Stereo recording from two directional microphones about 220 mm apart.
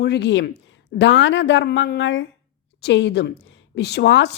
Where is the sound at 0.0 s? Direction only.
50° left (ahead or behind).